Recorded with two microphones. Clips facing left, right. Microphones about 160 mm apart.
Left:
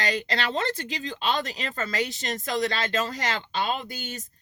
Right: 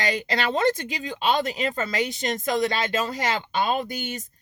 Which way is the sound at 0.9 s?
10° right (ahead or behind).